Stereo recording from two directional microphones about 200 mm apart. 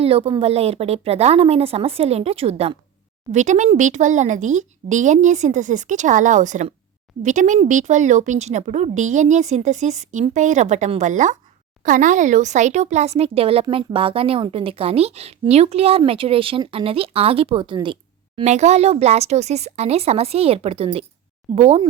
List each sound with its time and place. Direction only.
0.0 s speech: 30° right (ahead or behind)
18.3 s speech: 35° right (ahead or behind)